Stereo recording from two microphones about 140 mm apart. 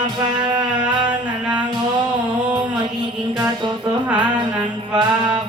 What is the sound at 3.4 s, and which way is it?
Music, 35° right (ahead or behind).